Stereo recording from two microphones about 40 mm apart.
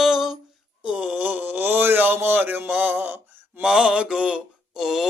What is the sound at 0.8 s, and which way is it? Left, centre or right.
Speech, right.